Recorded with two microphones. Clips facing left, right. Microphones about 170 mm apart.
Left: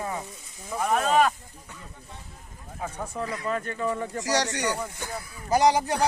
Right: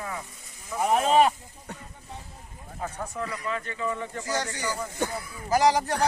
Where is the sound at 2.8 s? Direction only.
15° left (ahead or behind).